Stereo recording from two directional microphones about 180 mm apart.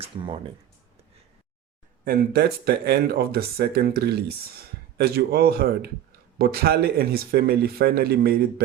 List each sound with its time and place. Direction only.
2.0 s speech: 60° right (ahead or behind)